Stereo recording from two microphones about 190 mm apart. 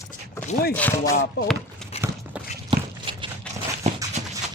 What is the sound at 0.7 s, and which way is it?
Speech, 10° left (ahead or behind).